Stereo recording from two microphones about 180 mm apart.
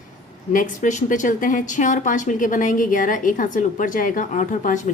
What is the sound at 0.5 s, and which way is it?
A woman's voice, 45° left (ahead or behind).